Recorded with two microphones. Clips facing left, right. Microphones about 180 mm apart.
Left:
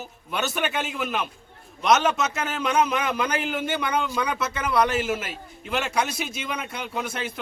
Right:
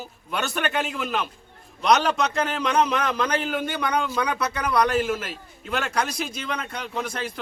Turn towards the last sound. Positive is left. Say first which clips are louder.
# even
turn(degrees=5)  # may be behind; listen again after turning